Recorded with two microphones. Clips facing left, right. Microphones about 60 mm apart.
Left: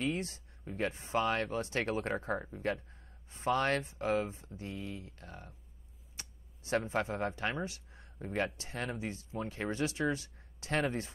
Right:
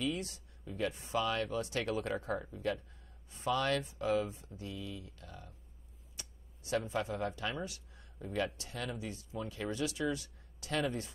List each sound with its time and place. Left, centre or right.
0.0 s speech: left